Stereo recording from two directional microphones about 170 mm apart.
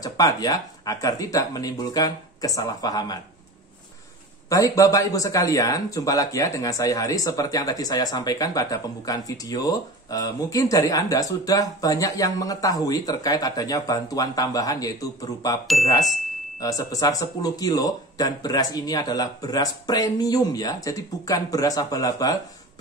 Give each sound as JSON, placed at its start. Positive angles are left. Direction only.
{"t": 0.0, "sound": "speech", "side_deg": 20}
{"t": 4.5, "sound": "speech", "side_deg": 20}